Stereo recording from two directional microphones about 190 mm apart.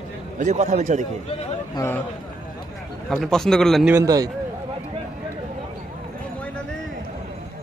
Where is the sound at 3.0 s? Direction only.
Centre (ahead or behind).